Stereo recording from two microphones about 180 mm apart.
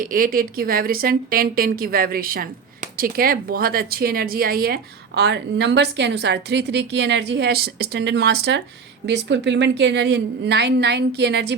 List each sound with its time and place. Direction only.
0.0 s a woman's voice: 50° right (ahead or behind); by 11.5 s 70° right (ahead or behind)